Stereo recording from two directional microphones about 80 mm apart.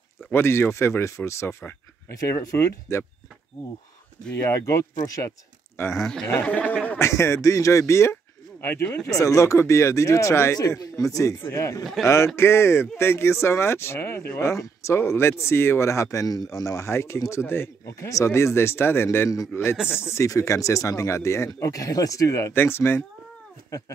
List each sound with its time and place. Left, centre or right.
0.3 s speech: left
4.5 s speech: left
5.9 s speech: centre
6.4 s a sound: centre
7.0 s speech: left
11.8 s speech: centre
12.4 s speech: left
19.5 s a man's voice: left